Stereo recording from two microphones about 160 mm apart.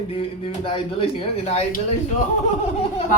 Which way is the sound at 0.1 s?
35° left (ahead or behind).